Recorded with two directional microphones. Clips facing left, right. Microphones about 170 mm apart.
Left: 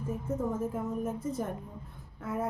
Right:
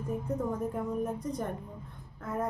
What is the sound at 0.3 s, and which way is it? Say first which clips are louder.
A woman's voice: left 2 dB; 5° left (ahead or behind).